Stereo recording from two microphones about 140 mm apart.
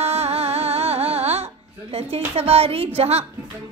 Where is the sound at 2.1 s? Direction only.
45° right (ahead or behind).